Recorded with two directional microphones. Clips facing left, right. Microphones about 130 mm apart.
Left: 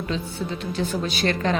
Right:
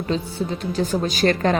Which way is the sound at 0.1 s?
40° right (ahead or behind).